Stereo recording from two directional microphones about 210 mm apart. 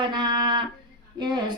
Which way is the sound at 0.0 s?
20° right (ahead or behind).